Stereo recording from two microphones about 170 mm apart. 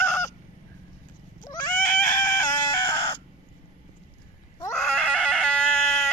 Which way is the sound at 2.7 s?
25° left (ahead or behind).